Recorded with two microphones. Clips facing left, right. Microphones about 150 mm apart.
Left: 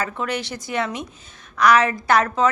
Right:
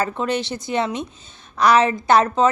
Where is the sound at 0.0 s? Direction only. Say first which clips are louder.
Right 4 dB; 25° right (ahead or behind).